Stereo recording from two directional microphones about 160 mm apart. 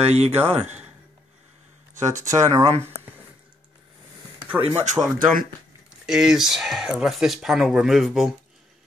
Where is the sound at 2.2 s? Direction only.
20° right (ahead or behind).